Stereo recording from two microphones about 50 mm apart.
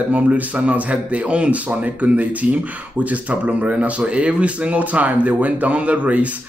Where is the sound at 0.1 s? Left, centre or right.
Right.